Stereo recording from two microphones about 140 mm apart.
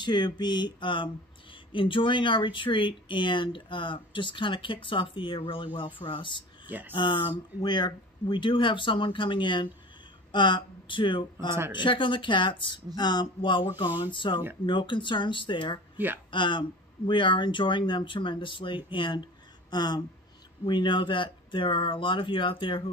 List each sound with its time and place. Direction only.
0.0 s speech: 30° left (ahead or behind)